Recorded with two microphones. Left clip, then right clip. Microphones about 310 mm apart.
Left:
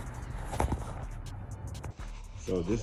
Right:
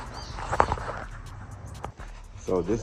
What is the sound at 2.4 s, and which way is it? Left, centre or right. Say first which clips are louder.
Speech: right 6 dB; centre.